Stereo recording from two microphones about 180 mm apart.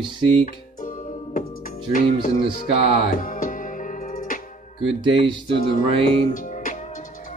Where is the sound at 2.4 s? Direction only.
35° right (ahead or behind).